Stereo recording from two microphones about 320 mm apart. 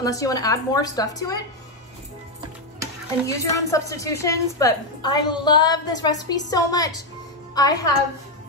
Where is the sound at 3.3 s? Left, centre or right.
Centre.